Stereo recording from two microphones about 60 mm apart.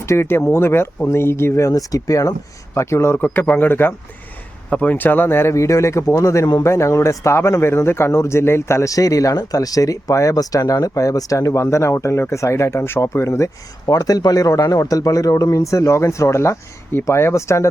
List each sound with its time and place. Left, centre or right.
0.0 s speech: left
1.7 s speech: left
2.7 s speech: left
3.2 s speech: left
5.5 s speech: left
8.9 s speech: left
13.8 s speech: left